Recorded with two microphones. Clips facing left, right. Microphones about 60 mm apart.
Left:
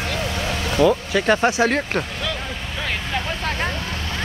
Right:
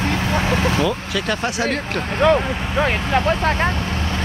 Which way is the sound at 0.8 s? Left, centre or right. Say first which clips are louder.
Left 4 dB; left.